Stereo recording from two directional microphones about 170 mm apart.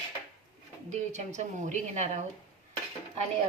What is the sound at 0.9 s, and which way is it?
A woman's voice, 45° right (ahead or behind).